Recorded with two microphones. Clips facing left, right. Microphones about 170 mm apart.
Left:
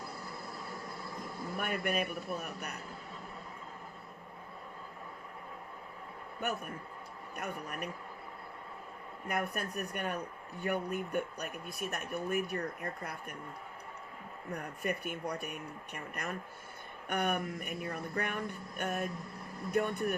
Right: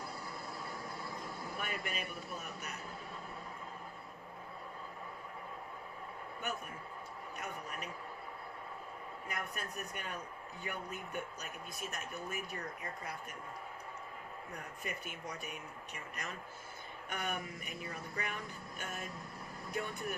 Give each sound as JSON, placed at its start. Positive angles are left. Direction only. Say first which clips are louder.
{"t": 1.5, "sound": "speech", "louder": "left 9 dB", "side_deg": 55}
{"t": 7.3, "sound": "a sound", "louder": "left 5 dB", "side_deg": 60}
{"t": 9.2, "sound": "speech", "louder": "left 9 dB", "side_deg": 60}
{"t": 14.5, "sound": "speech", "louder": "left 9 dB", "side_deg": 60}